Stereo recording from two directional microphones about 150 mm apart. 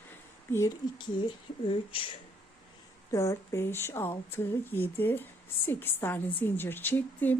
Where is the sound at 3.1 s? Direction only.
20° left (ahead or behind).